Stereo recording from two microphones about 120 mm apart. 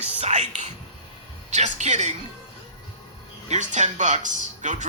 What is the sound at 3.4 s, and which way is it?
Speech, 80° right.